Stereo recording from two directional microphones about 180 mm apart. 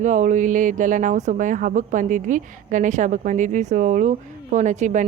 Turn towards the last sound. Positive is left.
turn(degrees=-40)  # may be behind; listen again after turning